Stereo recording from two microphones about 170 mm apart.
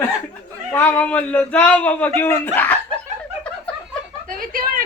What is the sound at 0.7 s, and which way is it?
A man's voice, 10° left (ahead or behind).